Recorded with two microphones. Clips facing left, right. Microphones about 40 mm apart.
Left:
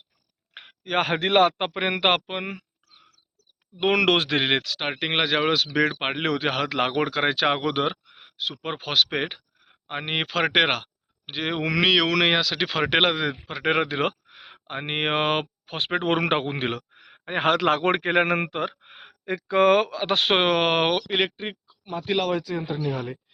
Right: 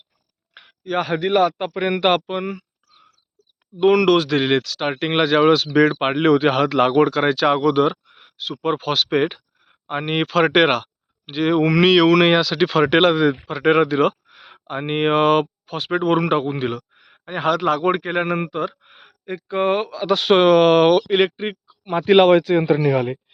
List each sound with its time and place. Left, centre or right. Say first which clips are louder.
0.5 s speech: right 2 dB; left
2.0 s speech: right 4 dB; centre
3.8 s speech: right 6 dB; left; by 6.7 s centre
6.7 s speech: right 8 dB; centre
8.1 s speech: right 1 dB; centre
13.8 s speech: right 8 dB; centre
15.7 s a man's voice: right 5 dB; left
18.4 s speech: right 4 dB; left
20.1 s speech: right 4 dB; left
20.3 s speech: right 10 dB; centre
21.1 s speech: right 7 dB; centre
21.7 s a sound: right 5 dB; centre
22.2 s a man's voice: right 12 dB; right